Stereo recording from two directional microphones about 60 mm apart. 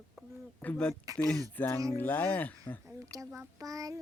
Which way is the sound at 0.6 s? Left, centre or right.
Left.